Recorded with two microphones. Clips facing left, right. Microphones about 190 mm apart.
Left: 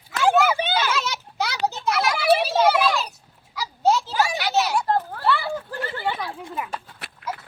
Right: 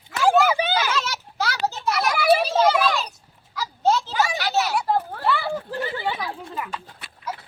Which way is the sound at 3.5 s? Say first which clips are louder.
Left 1 dB; 10° left (ahead or behind).